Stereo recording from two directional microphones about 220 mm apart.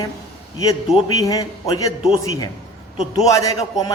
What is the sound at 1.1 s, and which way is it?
Speech, 15° left (ahead or behind).